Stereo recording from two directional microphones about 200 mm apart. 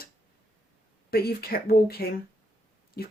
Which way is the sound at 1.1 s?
50° left (ahead or behind).